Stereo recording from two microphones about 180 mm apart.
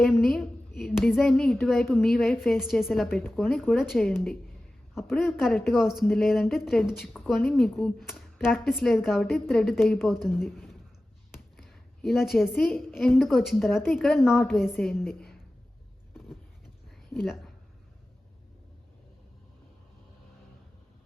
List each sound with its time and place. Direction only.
0.0 s a woman's voice: centre (ahead or behind)
0.8 s a sound: centre (ahead or behind)
1.3 s a woman's voice: centre (ahead or behind)
17.1 s speech: centre (ahead or behind)